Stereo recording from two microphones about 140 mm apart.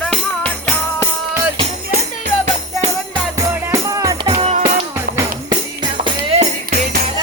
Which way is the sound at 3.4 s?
25° right (ahead or behind).